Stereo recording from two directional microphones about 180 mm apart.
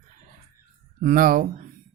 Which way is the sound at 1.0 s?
50° right (ahead or behind).